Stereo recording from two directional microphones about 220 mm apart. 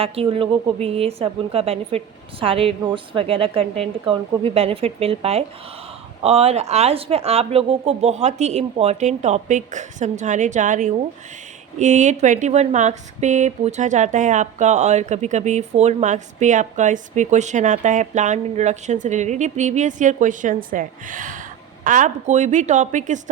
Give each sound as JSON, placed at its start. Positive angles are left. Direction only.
{"t": 0.0, "sound": "speech", "side_deg": -25}